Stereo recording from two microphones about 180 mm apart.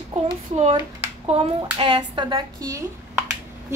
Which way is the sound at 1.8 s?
25° right (ahead or behind).